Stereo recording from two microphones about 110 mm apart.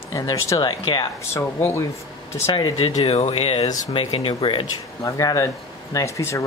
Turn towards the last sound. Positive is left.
turn(degrees=30)  # may be behind; listen again after turning